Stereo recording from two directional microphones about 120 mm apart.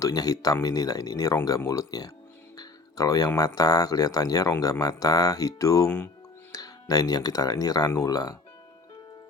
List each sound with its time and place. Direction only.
0.0 s speech: 30° left (ahead or behind)